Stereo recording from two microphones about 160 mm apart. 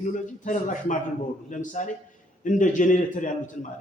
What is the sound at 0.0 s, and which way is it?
A man's voice, 55° left (ahead or behind).